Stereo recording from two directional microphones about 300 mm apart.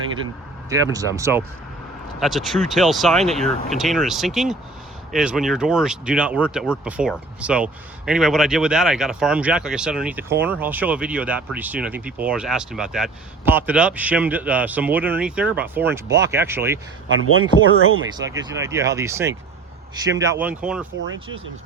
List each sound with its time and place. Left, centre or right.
0.7 s speech: centre
17.1 s speech: right
18.3 s speech: centre